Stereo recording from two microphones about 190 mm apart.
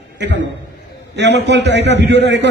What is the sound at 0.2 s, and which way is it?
A man's voice, 65° right (ahead or behind).